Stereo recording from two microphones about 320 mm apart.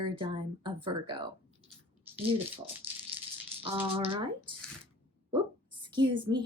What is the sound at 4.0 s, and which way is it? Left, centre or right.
Speech, centre.